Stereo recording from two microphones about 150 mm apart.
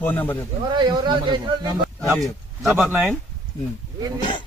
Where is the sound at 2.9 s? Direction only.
15° right (ahead or behind).